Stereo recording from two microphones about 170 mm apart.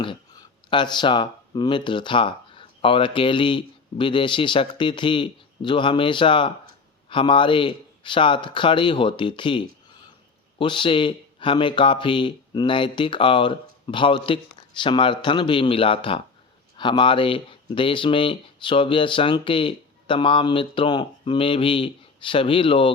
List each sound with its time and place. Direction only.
0.0 s speech: 30° left (ahead or behind)